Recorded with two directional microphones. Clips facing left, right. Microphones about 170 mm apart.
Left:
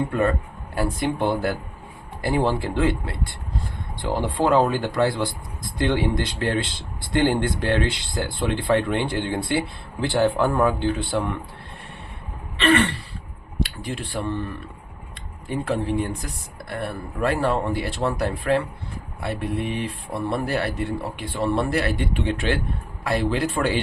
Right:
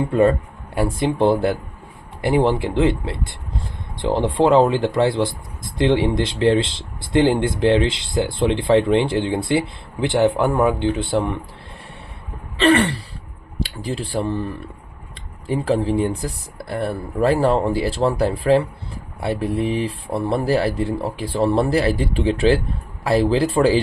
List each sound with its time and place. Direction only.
0.1 s speech: 25° right (ahead or behind)
12.6 s speech: 35° right (ahead or behind)